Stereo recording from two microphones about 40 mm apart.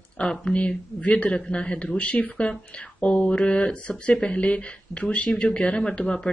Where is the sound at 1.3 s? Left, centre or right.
Left.